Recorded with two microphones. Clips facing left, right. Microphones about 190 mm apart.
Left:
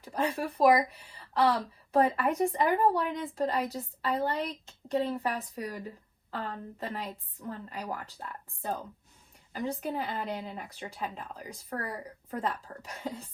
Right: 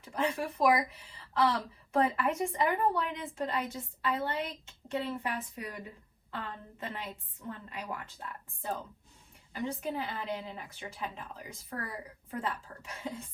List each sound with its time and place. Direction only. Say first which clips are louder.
0.0 s speech: left 2 dB; 35° left (ahead or behind)